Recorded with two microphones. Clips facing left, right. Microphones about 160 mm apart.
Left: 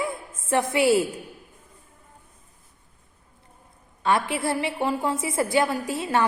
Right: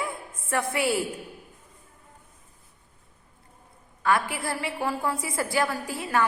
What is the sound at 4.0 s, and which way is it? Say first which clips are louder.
A woman's voice: left 2 dB; 25° left (ahead or behind).